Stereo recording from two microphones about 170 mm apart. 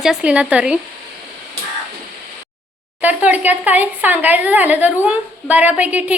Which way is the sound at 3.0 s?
10° right (ahead or behind).